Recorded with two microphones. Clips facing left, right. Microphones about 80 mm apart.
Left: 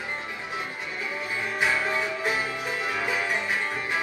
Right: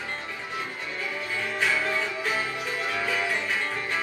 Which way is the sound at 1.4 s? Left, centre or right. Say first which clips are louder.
Left 1 dB; centre.